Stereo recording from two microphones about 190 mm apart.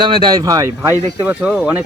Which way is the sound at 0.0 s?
25° right (ahead or behind).